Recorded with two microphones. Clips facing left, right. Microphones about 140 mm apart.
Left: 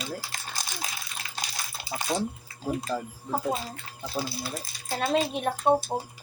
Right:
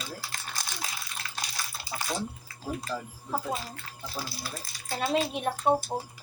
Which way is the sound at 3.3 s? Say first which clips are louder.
Left 3 dB; 25° left (ahead or behind).